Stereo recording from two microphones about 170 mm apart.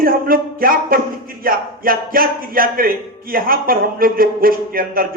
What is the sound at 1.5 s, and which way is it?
A man's voice, 60° right (ahead or behind).